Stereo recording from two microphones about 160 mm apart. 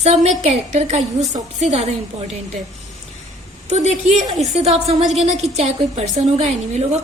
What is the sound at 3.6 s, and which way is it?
A woman's voice, 45° right (ahead or behind).